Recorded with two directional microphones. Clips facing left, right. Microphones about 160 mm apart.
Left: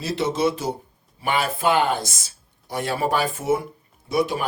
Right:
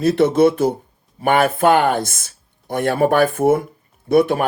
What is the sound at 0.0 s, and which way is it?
Speech, 55° right (ahead or behind).